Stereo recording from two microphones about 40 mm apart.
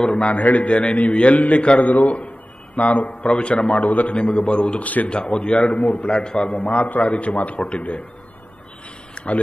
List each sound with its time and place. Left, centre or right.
0.1 s a man's voice: left
3.3 s a man's voice: left
3.6 s a man's voice: left
4.8 s a man's voice: left
5.7 s a man's voice: left
6.0 s a man's voice: left
6.6 s a man's voice: left
9.1 s a sound: left